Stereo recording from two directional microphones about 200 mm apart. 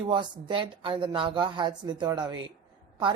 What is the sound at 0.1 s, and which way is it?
A woman's voice, 25° right (ahead or behind).